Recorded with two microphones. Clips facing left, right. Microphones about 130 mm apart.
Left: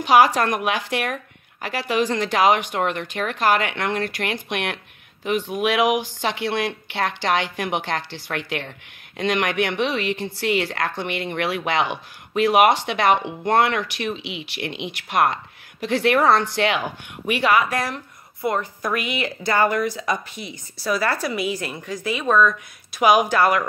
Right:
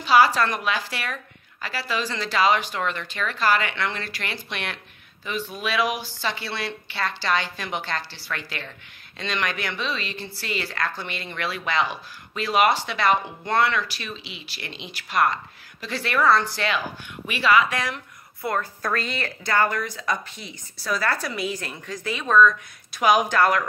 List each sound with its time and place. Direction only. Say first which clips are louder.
0.0 s a woman's voice: left 2 dB; 60° left (ahead or behind)
17.3 s speech: left 1 dB; 55° left (ahead or behind)
18.4 s speech: left 3 dB; 20° left (ahead or behind)